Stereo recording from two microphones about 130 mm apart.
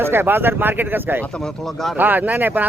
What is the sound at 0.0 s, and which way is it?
Speech, 15° right (ahead or behind).